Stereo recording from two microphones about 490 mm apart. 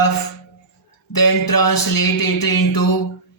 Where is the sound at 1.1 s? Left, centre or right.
Left.